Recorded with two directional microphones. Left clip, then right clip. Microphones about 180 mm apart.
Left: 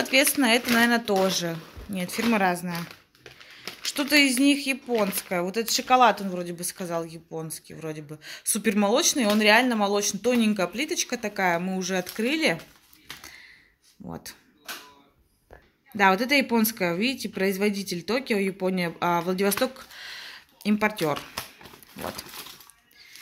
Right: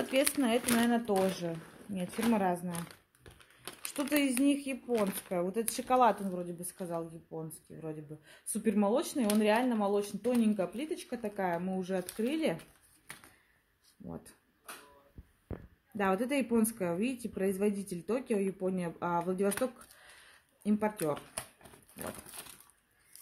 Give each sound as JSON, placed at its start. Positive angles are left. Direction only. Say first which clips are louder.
{"t": 0.1, "sound": "speech", "louder": "left 9 dB", "side_deg": 5}
{"t": 3.9, "sound": "speech", "louder": "left 11 dB", "side_deg": 0}
{"t": 4.8, "sound": "speech", "louder": "left 4 dB", "side_deg": 15}
{"t": 5.5, "sound": "speech", "louder": "left 11 dB", "side_deg": 0}
{"t": 6.8, "sound": "speech", "louder": "left 8 dB", "side_deg": 20}
{"t": 7.4, "sound": "speech", "louder": "left 8 dB", "side_deg": 5}
{"t": 16.0, "sound": "speech", "louder": "left 11 dB", "side_deg": 5}